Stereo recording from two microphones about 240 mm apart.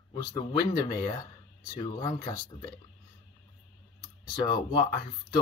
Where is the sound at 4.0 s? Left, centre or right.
Centre.